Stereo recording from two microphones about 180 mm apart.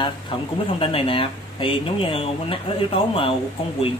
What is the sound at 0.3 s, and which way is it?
Speech, 30° left (ahead or behind).